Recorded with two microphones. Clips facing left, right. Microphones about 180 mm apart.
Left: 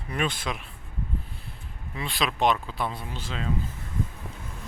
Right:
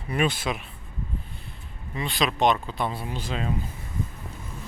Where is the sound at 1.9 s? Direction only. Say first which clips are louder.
Right 3 dB; centre (ahead or behind); by 3.5 s 15° right (ahead or behind).